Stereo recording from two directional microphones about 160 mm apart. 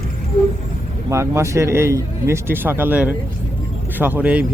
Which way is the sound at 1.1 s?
15° right (ahead or behind).